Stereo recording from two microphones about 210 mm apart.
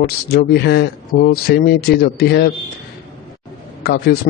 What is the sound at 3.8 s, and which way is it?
Speech, 50° left (ahead or behind).